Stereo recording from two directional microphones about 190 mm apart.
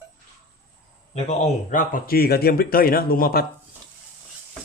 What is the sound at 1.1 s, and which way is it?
Speech, 40° left (ahead or behind).